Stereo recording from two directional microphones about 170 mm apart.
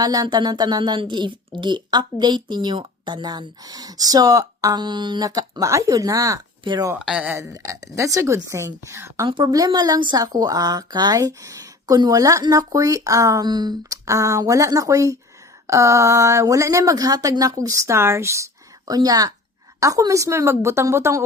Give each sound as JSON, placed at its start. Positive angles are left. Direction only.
{"t": 0.0, "sound": "speech", "side_deg": -20}
{"t": 7.0, "sound": "a woman's voice", "side_deg": -5}
{"t": 7.5, "sound": "a woman's voice", "side_deg": -20}